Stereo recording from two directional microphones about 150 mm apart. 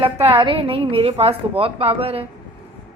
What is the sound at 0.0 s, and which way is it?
A woman's voice, 40° right (ahead or behind).